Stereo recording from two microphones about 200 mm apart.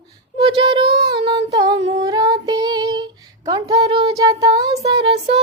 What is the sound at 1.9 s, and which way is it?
Speech, 20° right (ahead or behind).